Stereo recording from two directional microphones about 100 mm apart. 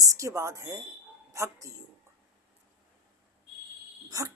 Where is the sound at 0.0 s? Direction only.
30° right (ahead or behind).